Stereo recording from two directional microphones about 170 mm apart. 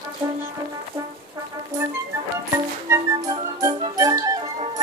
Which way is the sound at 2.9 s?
20° right (ahead or behind).